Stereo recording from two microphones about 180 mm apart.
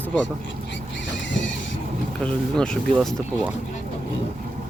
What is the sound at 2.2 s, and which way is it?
Speech, 5° left (ahead or behind).